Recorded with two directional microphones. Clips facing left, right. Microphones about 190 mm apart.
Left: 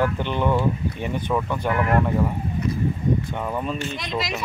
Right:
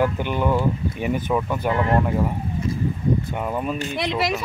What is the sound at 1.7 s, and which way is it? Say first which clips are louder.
Speech: even; 25° right (ahead or behind).